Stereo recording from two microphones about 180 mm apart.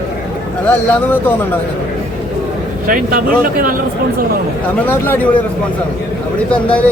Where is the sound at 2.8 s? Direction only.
55° right (ahead or behind).